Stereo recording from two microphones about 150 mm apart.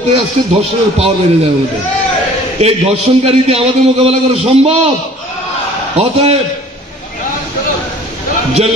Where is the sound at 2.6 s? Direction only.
45° right (ahead or behind).